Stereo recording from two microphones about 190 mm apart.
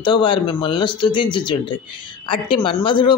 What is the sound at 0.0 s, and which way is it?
Speech, 25° left (ahead or behind).